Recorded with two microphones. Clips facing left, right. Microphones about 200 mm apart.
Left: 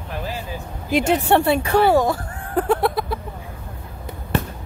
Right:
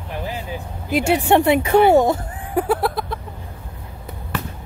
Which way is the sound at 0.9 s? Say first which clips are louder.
Right 1 dB; 10° right (ahead or behind).